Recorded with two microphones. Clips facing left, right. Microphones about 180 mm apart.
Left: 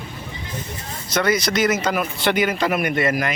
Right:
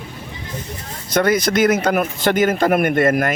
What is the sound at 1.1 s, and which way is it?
Speech, 50° right (ahead or behind).